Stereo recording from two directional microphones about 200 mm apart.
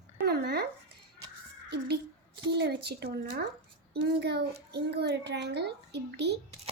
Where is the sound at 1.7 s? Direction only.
55° right (ahead or behind).